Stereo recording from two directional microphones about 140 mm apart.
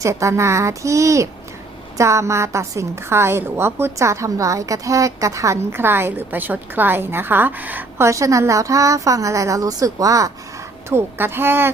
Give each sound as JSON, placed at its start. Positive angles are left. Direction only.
{"t": 0.0, "sound": "a woman's voice", "side_deg": -20}